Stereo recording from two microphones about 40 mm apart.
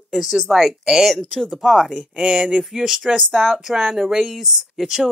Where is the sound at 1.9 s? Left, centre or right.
Centre.